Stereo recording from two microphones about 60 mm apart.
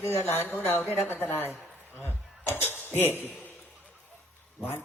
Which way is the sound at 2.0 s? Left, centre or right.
Left.